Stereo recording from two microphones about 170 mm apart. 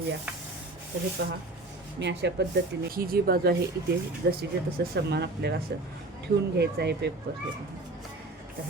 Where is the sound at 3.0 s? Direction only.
60° right (ahead or behind); by 5.5 s 75° right (ahead or behind).